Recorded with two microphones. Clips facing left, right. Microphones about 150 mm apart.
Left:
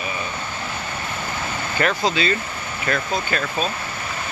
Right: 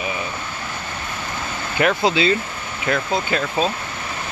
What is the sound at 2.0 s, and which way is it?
Speech, 20° right (ahead or behind).